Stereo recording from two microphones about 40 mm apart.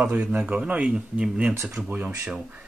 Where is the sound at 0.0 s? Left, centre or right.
Right.